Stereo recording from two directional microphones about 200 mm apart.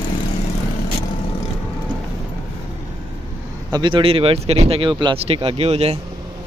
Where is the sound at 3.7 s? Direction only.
25° right (ahead or behind).